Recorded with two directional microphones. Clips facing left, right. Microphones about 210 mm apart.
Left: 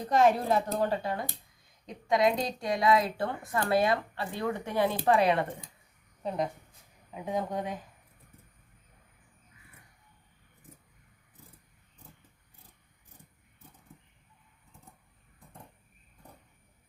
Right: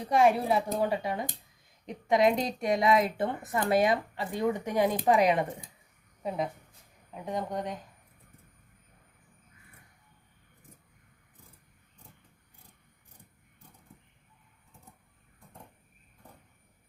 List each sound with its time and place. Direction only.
0.0 s a woman's voice: 10° right (ahead or behind)
6.2 s speech: 5° right (ahead or behind)